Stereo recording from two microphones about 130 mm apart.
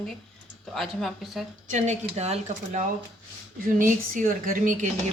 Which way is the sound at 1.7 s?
60° right (ahead or behind).